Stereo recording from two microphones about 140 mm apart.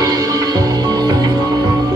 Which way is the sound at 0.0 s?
25° right (ahead or behind).